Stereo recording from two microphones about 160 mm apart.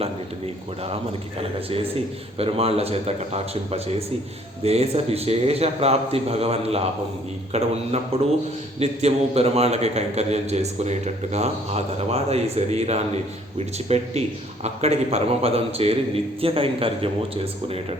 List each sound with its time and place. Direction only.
1.4 s a man's voice: 35° right (ahead or behind)